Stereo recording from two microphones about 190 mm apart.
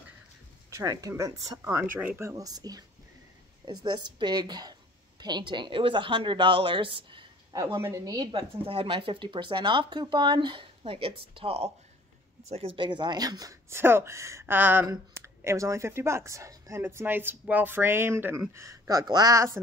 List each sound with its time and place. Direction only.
0.7 s a woman's voice: 15° right (ahead or behind)
7.8 s speech: 15° right (ahead or behind)